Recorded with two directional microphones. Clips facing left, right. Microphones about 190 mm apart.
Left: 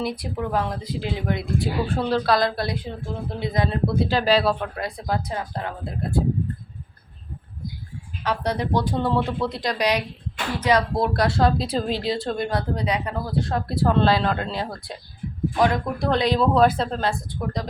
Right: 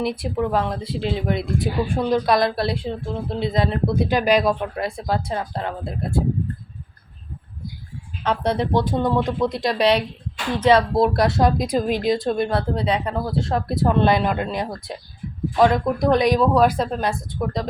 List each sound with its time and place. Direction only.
0.0 s speech: 25° right (ahead or behind)
8.2 s speech: 25° right (ahead or behind)